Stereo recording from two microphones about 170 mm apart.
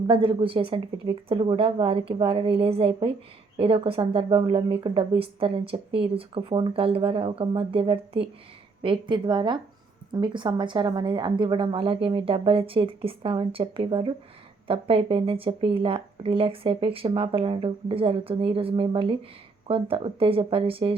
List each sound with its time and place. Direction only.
0.1 s a woman's voice: 30° right (ahead or behind)